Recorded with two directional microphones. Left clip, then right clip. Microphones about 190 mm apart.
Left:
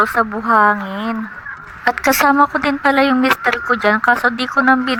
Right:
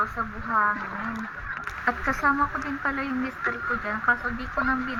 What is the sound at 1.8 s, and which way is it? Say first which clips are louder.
Speech: left 11 dB; 60° left (ahead or behind).